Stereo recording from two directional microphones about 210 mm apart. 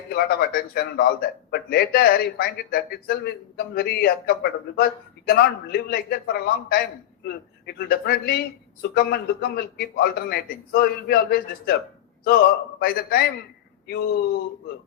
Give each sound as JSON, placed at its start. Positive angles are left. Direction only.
{"t": 0.1, "sound": "speech", "side_deg": 50}